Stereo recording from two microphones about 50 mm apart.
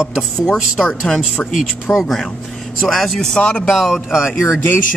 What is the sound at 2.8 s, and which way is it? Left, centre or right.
Speech, centre.